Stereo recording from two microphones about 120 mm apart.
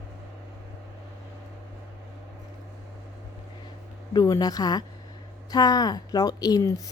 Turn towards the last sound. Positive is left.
turn(degrees=30)  # may be behind; listen again after turning